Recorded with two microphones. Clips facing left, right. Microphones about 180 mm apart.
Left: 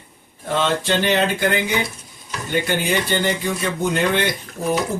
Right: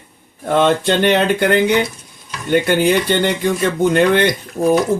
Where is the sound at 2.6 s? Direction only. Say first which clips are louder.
Right 7 dB; 65° right (ahead or behind).